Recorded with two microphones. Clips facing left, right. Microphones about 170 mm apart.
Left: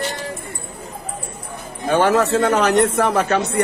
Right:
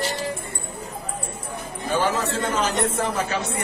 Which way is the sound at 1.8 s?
70° left (ahead or behind).